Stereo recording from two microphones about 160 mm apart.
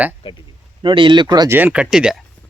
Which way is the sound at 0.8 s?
30° right (ahead or behind).